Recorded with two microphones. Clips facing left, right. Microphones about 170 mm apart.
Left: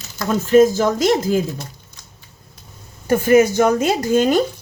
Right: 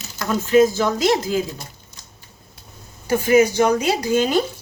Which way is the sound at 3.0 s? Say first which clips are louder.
Left 2 dB; 50° left (ahead or behind).